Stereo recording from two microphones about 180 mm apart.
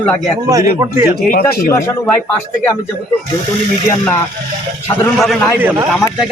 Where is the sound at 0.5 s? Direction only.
20° right (ahead or behind).